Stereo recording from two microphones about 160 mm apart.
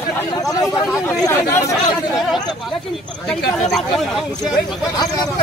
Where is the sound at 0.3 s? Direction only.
20° left (ahead or behind).